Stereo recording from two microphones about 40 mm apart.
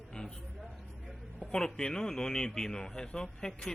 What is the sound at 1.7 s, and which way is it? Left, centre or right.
Speech, centre.